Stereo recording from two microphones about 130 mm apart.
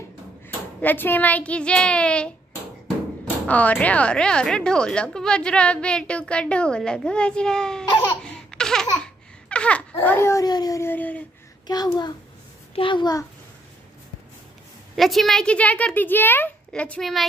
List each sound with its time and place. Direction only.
0.5 s child singing: 15° left (ahead or behind)
3.4 s a woman's voice: 10° left (ahead or behind)
8.2 s laughter: 5° left (ahead or behind); by 10.9 s 30° left (ahead or behind)
10.9 s a woman's voice: 10° left (ahead or behind)
11.6 s a child's voice: 30° left (ahead or behind)
15.0 s a woman's voice: centre (ahead or behind)